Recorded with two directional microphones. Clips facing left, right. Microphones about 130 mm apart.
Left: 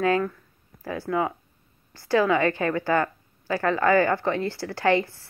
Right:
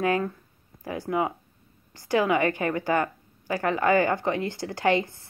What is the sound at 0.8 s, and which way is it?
A woman's voice, 15° right (ahead or behind).